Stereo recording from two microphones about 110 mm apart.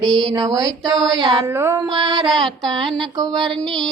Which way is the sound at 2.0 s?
45° right (ahead or behind).